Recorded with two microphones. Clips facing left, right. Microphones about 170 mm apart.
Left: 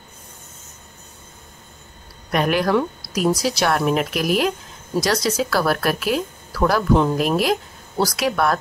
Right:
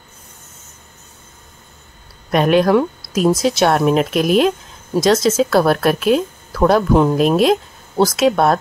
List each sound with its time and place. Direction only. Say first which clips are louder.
2.3 s a woman's voice: right 6 dB; 25° right (ahead or behind)